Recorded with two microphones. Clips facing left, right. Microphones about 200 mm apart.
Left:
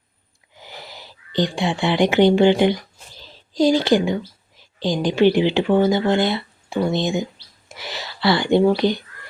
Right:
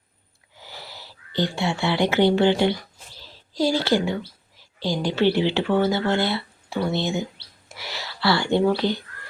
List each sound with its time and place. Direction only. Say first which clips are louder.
0.5 s speech: left 3 dB; 15° left (ahead or behind)
3.2 s a sound: left 5 dB; 20° left (ahead or behind)
4.8 s speech: left 5 dB; 15° left (ahead or behind)